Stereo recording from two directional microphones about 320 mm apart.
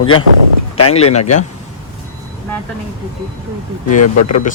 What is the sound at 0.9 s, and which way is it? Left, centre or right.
Speech, centre.